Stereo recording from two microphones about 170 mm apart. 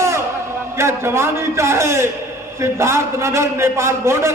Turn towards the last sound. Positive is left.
turn(degrees=-15)  # may be behind; listen again after turning